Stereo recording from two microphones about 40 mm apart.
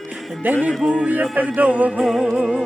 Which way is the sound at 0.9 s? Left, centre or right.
Right.